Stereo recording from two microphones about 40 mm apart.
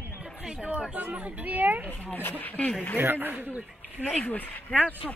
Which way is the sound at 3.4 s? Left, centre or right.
Right.